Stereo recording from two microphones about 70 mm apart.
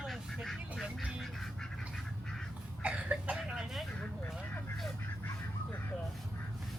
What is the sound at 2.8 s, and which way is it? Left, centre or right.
Cough, centre.